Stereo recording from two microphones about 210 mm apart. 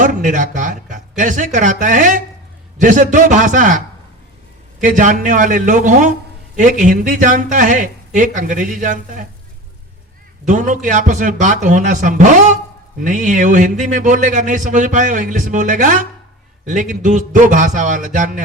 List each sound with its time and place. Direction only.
0.0 s a man's voice: 35° right (ahead or behind)
4.8 s a man's voice: 35° right (ahead or behind)
10.4 s a man's voice: 35° right (ahead or behind)